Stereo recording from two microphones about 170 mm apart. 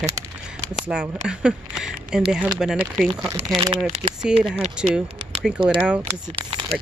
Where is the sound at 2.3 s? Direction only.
5° right (ahead or behind).